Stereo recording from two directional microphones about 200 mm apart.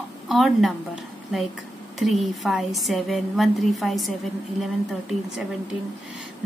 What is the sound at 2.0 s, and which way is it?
A woman's voice, centre (ahead or behind).